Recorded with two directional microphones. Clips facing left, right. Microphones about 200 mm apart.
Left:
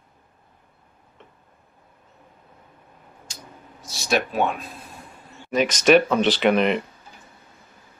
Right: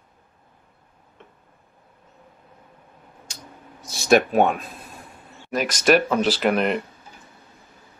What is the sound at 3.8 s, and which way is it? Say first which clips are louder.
Speech: right 6 dB; 50° right (ahead or behind).